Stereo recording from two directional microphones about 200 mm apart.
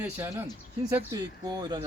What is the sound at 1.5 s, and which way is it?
Speech, 20° right (ahead or behind).